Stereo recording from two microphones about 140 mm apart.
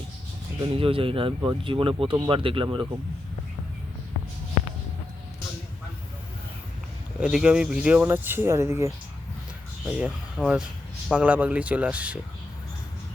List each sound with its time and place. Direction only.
0.6 s speech: 40° right (ahead or behind)
7.2 s speech: 5° right (ahead or behind)
10.3 s speech: 5° right (ahead or behind)